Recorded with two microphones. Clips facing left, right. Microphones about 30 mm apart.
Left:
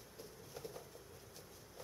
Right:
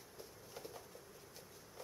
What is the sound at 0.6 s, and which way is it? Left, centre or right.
Patter, centre.